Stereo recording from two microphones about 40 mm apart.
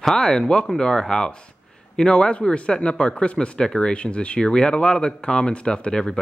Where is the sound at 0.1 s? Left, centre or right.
Centre.